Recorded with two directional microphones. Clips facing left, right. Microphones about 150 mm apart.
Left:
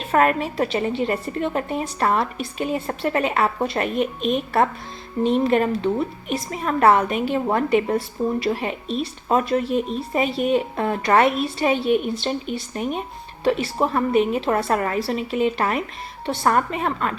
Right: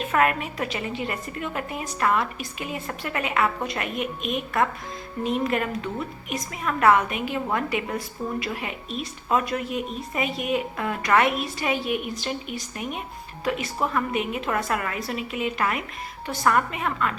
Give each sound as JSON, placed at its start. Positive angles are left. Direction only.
{"t": 0.0, "sound": "a woman's voice", "side_deg": 35}